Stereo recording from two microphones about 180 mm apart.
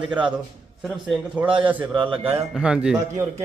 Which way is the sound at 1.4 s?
30° right (ahead or behind).